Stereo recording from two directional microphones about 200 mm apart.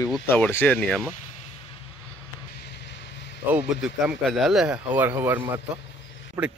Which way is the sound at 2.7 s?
60° left (ahead or behind).